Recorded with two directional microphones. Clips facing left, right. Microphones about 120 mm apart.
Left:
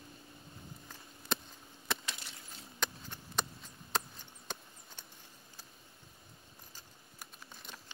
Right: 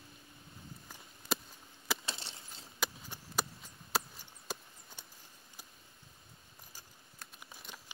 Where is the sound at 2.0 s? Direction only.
30° right (ahead or behind).